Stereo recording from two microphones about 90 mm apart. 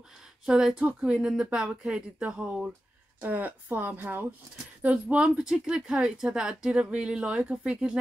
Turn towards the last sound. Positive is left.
turn(degrees=-10)  # may be behind; listen again after turning